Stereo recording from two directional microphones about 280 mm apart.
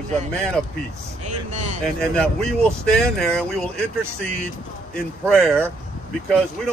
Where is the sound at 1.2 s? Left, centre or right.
Right.